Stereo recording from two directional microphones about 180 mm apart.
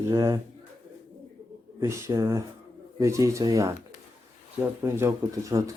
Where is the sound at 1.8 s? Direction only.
15° right (ahead or behind).